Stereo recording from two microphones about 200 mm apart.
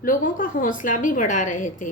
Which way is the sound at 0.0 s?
40° left (ahead or behind).